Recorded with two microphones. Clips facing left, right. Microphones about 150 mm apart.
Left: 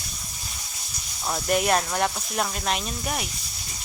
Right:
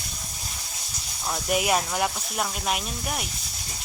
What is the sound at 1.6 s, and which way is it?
Speech, 5° right (ahead or behind).